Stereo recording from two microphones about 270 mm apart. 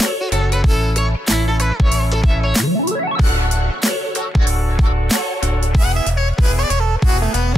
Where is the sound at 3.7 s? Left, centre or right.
Centre.